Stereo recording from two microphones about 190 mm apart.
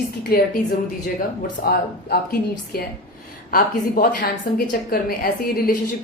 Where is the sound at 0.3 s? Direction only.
50° left (ahead or behind).